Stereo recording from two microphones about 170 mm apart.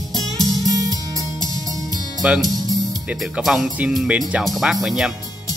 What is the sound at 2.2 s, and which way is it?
Speech, 5° right (ahead or behind).